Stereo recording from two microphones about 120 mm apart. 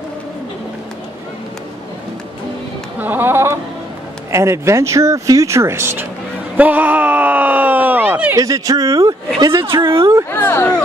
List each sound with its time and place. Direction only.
3.0 s speech: 15° right (ahead or behind)
6.5 s a sound: 15° right (ahead or behind)
8.4 s speech: 30° right (ahead or behind)
9.6 s speech: 45° right (ahead or behind)
9.9 s speech: 25° right (ahead or behind)
10.3 s speech: 20° left (ahead or behind)